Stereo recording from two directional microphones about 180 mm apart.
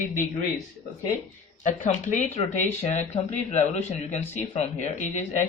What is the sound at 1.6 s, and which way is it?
Speech, 40° left (ahead or behind).